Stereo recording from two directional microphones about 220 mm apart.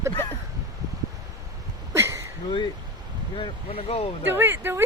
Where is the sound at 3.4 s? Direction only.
25° left (ahead or behind).